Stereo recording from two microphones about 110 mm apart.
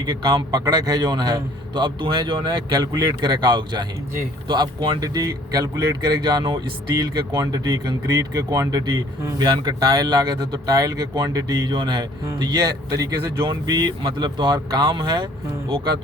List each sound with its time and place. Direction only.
0.0 s a man's voice: 40° right (ahead or behind)